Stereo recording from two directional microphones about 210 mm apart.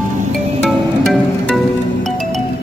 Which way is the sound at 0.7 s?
Centre (ahead or behind).